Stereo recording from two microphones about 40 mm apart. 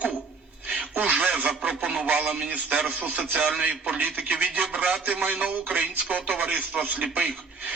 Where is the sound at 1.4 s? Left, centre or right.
Right.